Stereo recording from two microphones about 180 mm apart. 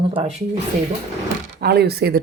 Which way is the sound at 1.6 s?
65° right (ahead or behind).